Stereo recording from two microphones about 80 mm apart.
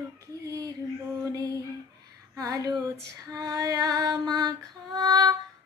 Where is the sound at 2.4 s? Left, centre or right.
Right.